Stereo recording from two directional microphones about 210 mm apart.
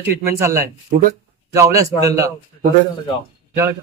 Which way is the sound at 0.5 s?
45° right (ahead or behind).